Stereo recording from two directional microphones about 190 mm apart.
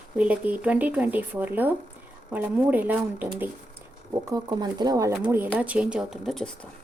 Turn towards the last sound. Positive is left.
turn(degrees=0)  # may be behind; listen again after turning